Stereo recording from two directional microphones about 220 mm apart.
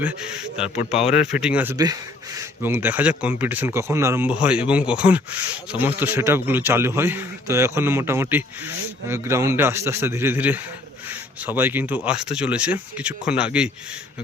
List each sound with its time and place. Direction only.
0.8 s speech: 30° left (ahead or behind)
1.3 s a man's voice: 5° right (ahead or behind)